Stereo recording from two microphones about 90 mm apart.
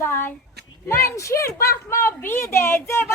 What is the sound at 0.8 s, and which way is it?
A woman's voice, 30° left (ahead or behind).